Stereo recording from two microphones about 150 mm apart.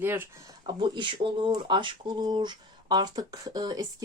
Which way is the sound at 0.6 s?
30° right (ahead or behind).